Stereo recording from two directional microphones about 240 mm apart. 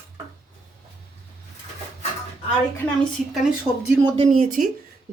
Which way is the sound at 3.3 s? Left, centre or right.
Centre.